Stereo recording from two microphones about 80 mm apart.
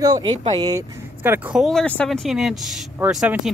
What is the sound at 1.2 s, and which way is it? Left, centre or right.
Speech, right.